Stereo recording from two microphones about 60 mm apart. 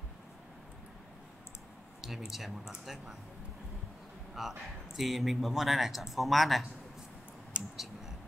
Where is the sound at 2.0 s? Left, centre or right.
Centre.